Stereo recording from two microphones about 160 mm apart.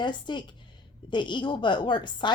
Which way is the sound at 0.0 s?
30° left (ahead or behind).